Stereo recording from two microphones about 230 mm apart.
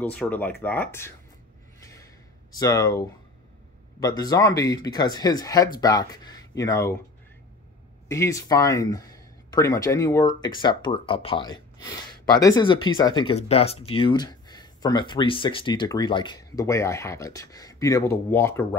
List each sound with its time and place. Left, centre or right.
0.0 s speech: centre
1.8 s a sound: centre
2.5 s speech: centre
4.0 s speech: centre
8.1 s speech: centre